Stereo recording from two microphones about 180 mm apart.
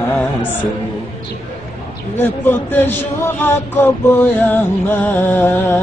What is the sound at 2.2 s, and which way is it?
Music, 10° left (ahead or behind).